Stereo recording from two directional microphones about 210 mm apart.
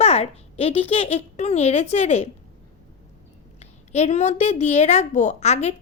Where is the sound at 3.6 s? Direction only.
30° left (ahead or behind).